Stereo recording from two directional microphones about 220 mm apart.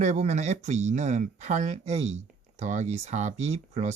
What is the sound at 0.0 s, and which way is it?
Speech, 30° right (ahead or behind).